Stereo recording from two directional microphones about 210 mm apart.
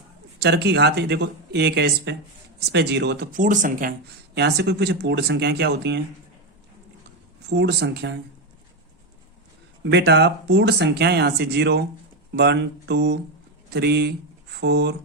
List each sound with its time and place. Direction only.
0.3 s speech: 50° right (ahead or behind)
3.3 s speech: 40° right (ahead or behind)
4.4 s speech: 55° right (ahead or behind)
7.5 s speech: 55° right (ahead or behind)
9.8 s a man's voice: 55° right (ahead or behind)